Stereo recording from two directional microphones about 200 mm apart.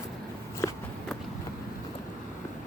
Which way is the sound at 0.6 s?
10° left (ahead or behind).